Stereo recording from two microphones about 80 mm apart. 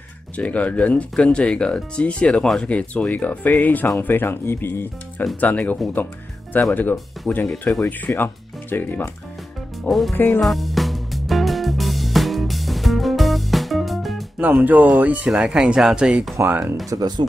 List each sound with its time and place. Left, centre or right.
0.4 s speech: centre
2.7 s speech: centre
9.8 s speech: centre
10.1 s speech: left
10.4 s music: centre
14.4 s speech: right
15.2 s speech: centre
16.4 s speech: right